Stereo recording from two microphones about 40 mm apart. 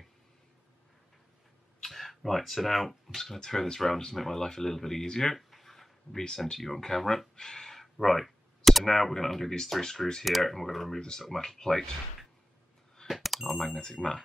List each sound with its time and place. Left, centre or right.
1.8 s speech: centre
3.3 s speech: centre
5.3 s a sound: centre
6.2 s speech: centre
10.2 s speech: centre
11.0 s speech: centre
13.0 s smoke detector: centre
13.6 s speech: centre